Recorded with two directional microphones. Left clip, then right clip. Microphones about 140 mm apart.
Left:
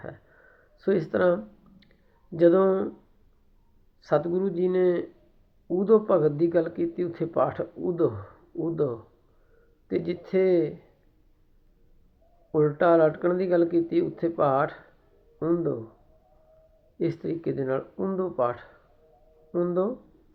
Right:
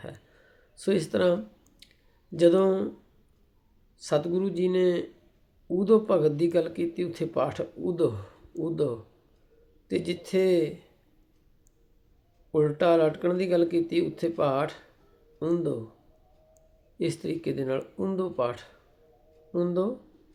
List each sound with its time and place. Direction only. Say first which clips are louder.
0.8 s speech: left 1 dB; 25° right (ahead or behind)
1.8 s clicking: right 6 dB; 25° right (ahead or behind)
2.3 s speech: left 1 dB; 25° right (ahead or behind)
4.0 s speech: left 2 dB; 20° right (ahead or behind)
12.5 s speech: left 2 dB; 20° right (ahead or behind)
17.0 s speech: left 1 dB; 25° right (ahead or behind)